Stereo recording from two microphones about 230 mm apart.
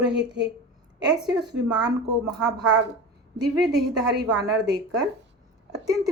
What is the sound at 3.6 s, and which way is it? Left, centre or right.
Speech, right.